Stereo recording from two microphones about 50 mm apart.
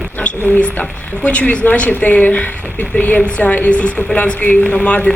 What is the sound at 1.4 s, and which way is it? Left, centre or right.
Speech, left.